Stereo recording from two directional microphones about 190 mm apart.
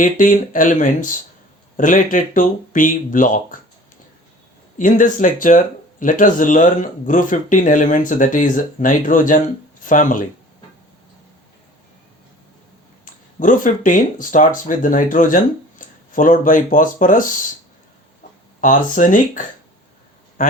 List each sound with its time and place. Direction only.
0.0 s speech: 45° left (ahead or behind)
4.8 s speech: 45° left (ahead or behind)
13.1 s speech: 45° left (ahead or behind)